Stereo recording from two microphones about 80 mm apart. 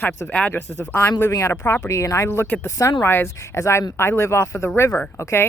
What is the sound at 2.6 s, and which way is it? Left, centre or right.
Speech, left.